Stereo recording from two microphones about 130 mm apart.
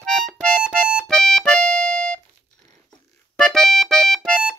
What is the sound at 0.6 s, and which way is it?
Music, 10° right (ahead or behind).